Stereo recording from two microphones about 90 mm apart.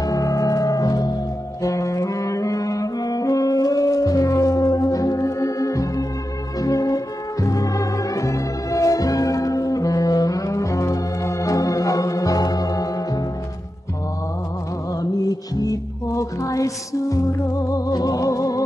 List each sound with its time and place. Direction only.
0.0 s music: 40° left (ahead or behind)
15.0 s music: 45° left (ahead or behind)